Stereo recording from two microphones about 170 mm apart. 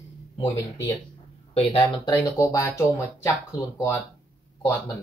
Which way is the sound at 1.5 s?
30° left (ahead or behind).